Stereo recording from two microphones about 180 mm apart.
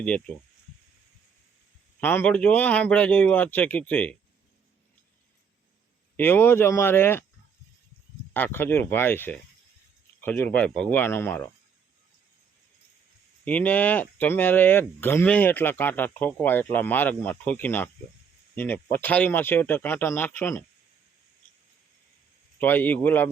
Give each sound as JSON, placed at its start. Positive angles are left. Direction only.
{"t": 0.0, "sound": "speech", "side_deg": 5}
{"t": 2.0, "sound": "speech", "side_deg": 10}
{"t": 6.1, "sound": "speech", "side_deg": 10}
{"t": 8.3, "sound": "speech", "side_deg": 10}
{"t": 13.4, "sound": "speech", "side_deg": 10}
{"t": 22.5, "sound": "speech", "side_deg": 10}